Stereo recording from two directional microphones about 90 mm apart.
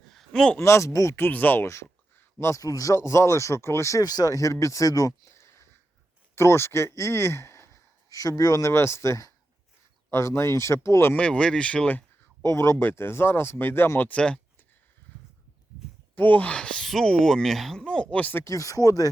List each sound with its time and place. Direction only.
0.1 s a sound: 5° left (ahead or behind)
0.6 s speech: 35° left (ahead or behind)
1.6 s speech: 30° left (ahead or behind)
4.0 s speech: 45° left (ahead or behind)
11.1 s speech: 10° left (ahead or behind)
12.5 s speech: 35° left (ahead or behind)
14.1 s speech: 10° left (ahead or behind)
16.1 s speech: 20° left (ahead or behind)
18.4 s speech: 40° left (ahead or behind)